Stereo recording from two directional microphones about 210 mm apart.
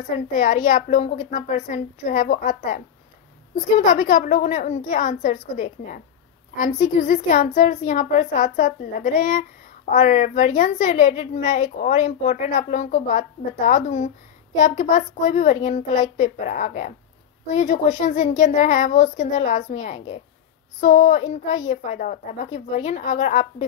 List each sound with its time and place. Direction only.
0.3 s a woman's voice: 35° left (ahead or behind)